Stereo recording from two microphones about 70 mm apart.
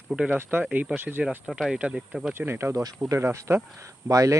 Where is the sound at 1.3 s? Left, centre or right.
Centre.